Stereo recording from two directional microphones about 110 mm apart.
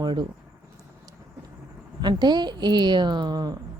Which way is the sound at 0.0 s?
40° right (ahead or behind).